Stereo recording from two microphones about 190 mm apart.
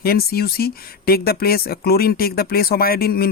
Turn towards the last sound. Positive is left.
turn(degrees=50)  # may be behind; listen again after turning